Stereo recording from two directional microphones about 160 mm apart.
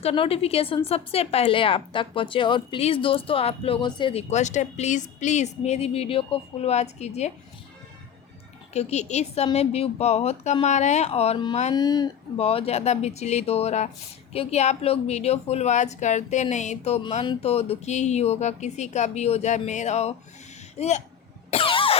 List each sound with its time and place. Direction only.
0.0 s speech: 35° left (ahead or behind)
8.7 s speech: 45° left (ahead or behind)
11.7 s speech: 25° left (ahead or behind)
12.4 s speech: 35° left (ahead or behind)
21.5 s cough: 35° left (ahead or behind)